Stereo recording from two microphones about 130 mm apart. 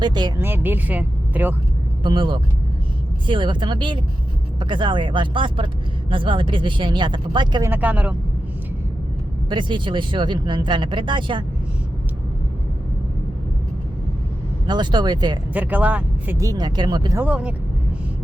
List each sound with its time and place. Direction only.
0.0 s speech: 35° right (ahead or behind)
0.3 s speech: 15° right (ahead or behind)
2.0 s speech: 40° right (ahead or behind)
7.6 s speech: 15° right (ahead or behind)
9.5 s speech: 35° right (ahead or behind)
14.7 s speech: 35° right (ahead or behind)
15.5 s speech: 10° right (ahead or behind)
16.5 s speech: 30° right (ahead or behind)
17.2 s speech: 10° right (ahead or behind)